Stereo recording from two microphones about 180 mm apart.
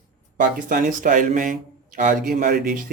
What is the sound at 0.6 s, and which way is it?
Speech, 50° right (ahead or behind).